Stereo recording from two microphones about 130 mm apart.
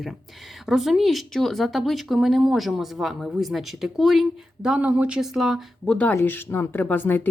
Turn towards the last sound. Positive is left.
turn(degrees=15)  # may be behind; listen again after turning